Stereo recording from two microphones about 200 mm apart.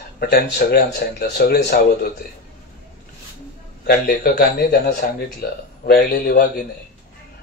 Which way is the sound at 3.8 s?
50° left (ahead or behind).